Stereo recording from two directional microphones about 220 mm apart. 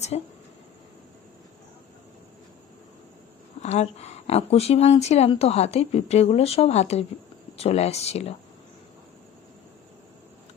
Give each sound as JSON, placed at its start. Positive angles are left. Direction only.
{"t": 0.1, "sound": "speech", "side_deg": 30}
{"t": 3.6, "sound": "speech", "side_deg": 30}